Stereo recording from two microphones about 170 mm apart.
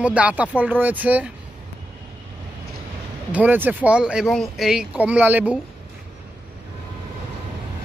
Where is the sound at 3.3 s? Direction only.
10° right (ahead or behind).